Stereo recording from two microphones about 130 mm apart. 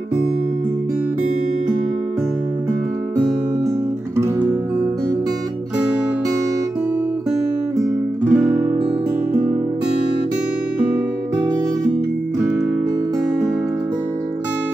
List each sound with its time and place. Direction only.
8.2 s music: 20° right (ahead or behind)